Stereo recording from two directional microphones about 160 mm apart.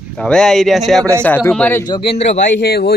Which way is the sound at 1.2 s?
10° left (ahead or behind).